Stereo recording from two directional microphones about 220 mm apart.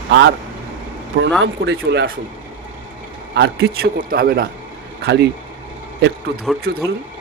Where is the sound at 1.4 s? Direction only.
50° right (ahead or behind).